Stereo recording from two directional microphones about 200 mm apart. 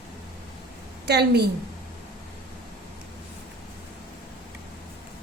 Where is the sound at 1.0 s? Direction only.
55° right (ahead or behind).